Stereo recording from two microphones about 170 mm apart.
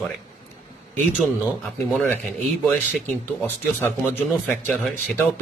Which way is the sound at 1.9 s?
Centre (ahead or behind).